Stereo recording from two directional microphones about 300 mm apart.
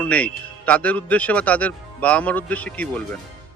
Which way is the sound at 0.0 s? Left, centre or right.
Centre.